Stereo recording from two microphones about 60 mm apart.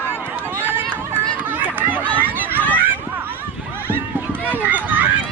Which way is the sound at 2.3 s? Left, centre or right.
Right.